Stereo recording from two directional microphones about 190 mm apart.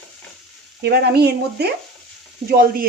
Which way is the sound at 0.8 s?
55° right (ahead or behind).